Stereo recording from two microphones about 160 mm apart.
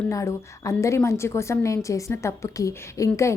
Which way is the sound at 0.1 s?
20° left (ahead or behind).